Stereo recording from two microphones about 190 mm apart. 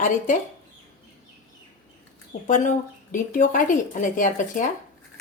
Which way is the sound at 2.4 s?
40° left (ahead or behind).